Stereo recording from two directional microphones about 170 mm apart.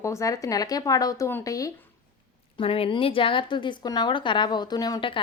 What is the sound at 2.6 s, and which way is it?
A woman's voice, 30° left (ahead or behind).